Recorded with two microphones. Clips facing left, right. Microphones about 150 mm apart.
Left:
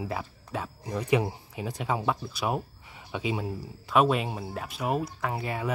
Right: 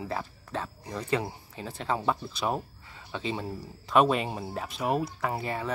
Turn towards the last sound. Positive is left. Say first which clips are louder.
# even
turn(degrees=5)  # may be behind; listen again after turning